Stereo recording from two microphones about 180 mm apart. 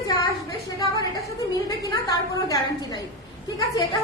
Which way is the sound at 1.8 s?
20° left (ahead or behind).